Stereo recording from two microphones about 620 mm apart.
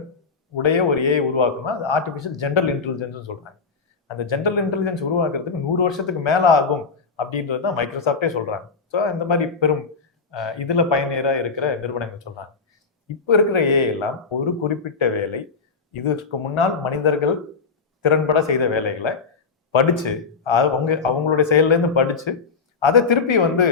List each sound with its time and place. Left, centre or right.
0.5 s a man's voice: left
13.2 s a man's voice: left
16.6 s a man's voice: left